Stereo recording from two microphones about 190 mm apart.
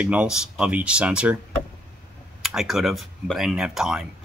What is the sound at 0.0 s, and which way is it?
Speech, 5° right (ahead or behind).